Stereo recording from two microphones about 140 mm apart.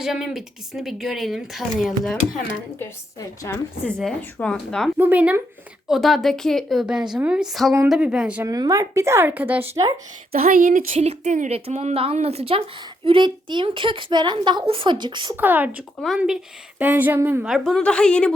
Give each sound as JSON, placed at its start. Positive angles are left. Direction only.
{"t": 0.0, "sound": "speech", "side_deg": 0}
{"t": 3.2, "sound": "a woman's voice", "side_deg": 20}
{"t": 3.8, "sound": "speech", "side_deg": 5}
{"t": 4.9, "sound": "a woman's voice", "side_deg": -10}
{"t": 5.9, "sound": "a woman's voice", "side_deg": 0}
{"t": 8.4, "sound": "speech", "side_deg": -25}
{"t": 10.3, "sound": "speech", "side_deg": -85}
{"t": 10.9, "sound": "a woman's voice", "side_deg": -50}
{"t": 13.1, "sound": "a woman's voice", "side_deg": -35}
{"t": 15.4, "sound": "a woman's voice", "side_deg": -15}
{"t": 16.0, "sound": "a woman's voice", "side_deg": 0}
{"t": 17.4, "sound": "speech", "side_deg": 0}